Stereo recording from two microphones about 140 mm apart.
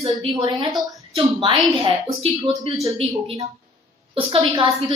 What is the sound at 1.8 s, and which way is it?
Speech, 45° right (ahead or behind).